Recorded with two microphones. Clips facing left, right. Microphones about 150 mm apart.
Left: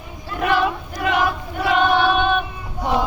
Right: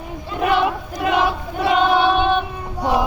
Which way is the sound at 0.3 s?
15° right (ahead or behind).